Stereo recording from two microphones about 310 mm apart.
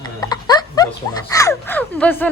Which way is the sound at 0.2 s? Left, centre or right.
Centre.